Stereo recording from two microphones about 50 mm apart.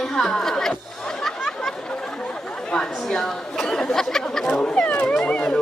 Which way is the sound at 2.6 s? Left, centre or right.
Centre.